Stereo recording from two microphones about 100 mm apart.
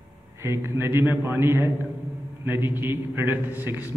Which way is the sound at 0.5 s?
25° right (ahead or behind).